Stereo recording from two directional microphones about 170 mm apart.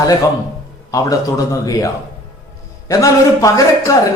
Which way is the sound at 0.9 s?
20° left (ahead or behind).